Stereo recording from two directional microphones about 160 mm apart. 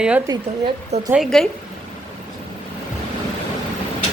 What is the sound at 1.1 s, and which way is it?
Speech, centre (ahead or behind).